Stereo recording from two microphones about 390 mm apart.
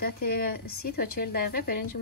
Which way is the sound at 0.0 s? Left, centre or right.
Left.